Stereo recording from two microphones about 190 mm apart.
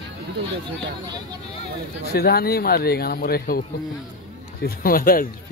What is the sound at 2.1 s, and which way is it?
Speech, 55° left (ahead or behind).